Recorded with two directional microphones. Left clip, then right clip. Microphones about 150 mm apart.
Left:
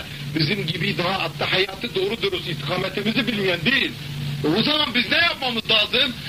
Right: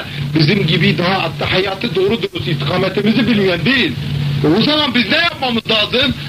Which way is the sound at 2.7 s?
25° left (ahead or behind).